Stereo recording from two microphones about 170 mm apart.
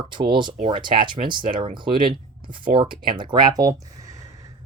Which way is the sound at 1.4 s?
55° right (ahead or behind).